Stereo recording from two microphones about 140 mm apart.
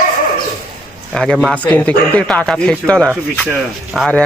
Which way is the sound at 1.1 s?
5° left (ahead or behind).